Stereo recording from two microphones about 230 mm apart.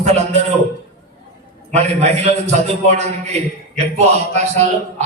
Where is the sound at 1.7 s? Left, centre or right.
Right.